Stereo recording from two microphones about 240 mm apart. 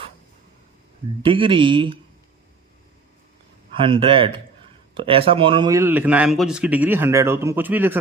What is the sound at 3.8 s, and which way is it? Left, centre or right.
A man's voice, right.